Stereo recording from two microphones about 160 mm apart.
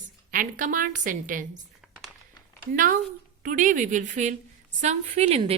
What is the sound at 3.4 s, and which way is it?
A woman's voice, 55° right (ahead or behind).